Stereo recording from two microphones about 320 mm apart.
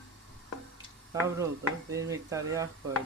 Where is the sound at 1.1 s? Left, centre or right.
Centre.